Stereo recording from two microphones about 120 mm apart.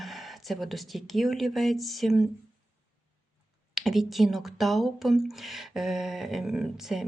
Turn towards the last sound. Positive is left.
turn(degrees=-5)  # may be behind; listen again after turning